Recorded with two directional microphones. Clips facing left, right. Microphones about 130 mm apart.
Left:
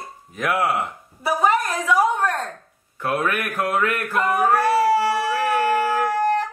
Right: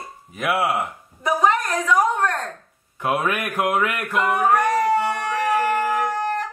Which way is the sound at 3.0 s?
15° right (ahead or behind).